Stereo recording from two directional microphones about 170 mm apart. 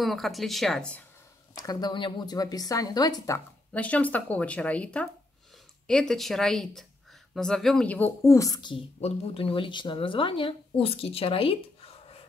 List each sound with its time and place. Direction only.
0.0 s speech: centre (ahead or behind)
1.6 s a woman's voice: 25° left (ahead or behind)